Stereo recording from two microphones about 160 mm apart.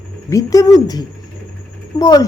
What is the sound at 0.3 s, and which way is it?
A woman's voice, 20° left (ahead or behind).